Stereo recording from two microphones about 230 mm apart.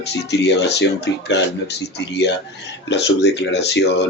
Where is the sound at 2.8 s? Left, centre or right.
Left.